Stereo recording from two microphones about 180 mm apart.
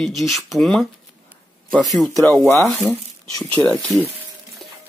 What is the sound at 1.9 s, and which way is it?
Speech, centre (ahead or behind).